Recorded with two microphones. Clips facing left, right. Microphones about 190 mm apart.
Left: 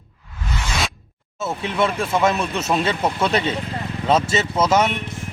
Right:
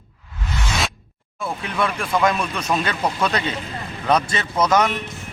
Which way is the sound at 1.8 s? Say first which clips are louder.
Left 1 dB; 25° left (ahead or behind).